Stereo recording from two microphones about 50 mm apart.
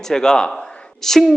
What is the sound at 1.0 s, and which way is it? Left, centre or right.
Speech, centre.